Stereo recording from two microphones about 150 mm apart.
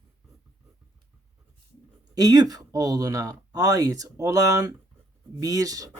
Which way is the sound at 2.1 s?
25° right (ahead or behind).